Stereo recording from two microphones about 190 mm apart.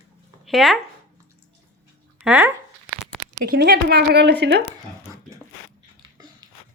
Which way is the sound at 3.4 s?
55° right (ahead or behind).